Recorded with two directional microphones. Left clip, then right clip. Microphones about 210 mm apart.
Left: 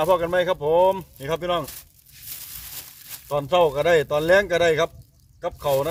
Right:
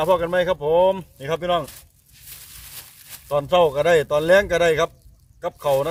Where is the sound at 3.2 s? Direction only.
5° right (ahead or behind).